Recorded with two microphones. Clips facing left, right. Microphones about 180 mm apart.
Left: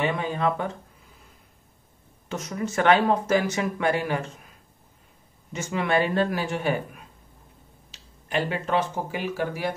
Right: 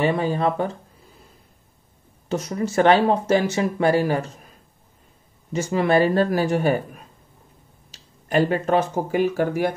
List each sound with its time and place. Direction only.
0.0 s speech: 35° right (ahead or behind)
2.2 s speech: 35° right (ahead or behind)
5.5 s speech: 35° right (ahead or behind)
7.9 s speech: 45° right (ahead or behind)